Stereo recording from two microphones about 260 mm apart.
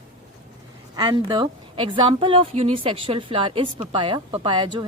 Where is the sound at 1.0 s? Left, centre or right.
Centre.